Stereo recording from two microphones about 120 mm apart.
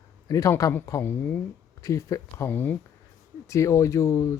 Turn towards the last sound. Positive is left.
turn(degrees=25)  # may be behind; listen again after turning